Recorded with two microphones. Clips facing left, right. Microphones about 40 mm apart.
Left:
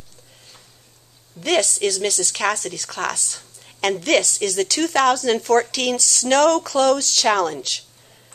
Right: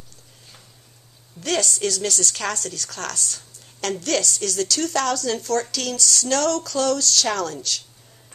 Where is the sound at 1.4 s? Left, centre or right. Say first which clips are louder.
Left 4 dB; left.